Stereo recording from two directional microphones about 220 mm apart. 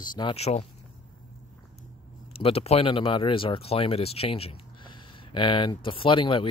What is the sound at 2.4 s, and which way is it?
Speech, 25° left (ahead or behind).